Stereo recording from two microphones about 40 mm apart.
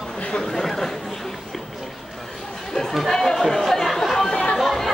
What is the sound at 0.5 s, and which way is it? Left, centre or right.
Chatter, centre.